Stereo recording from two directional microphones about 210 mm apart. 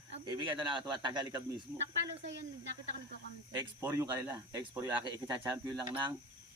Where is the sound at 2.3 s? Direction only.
60° right (ahead or behind).